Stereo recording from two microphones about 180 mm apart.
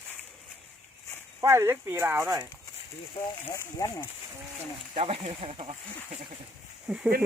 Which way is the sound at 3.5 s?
15° left (ahead or behind).